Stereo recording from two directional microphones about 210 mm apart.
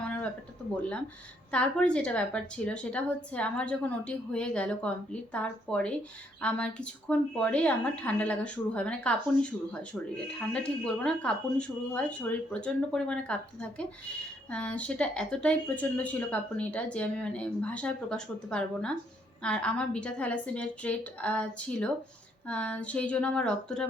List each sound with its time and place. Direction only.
1.5 s a woman's voice: 5° left (ahead or behind)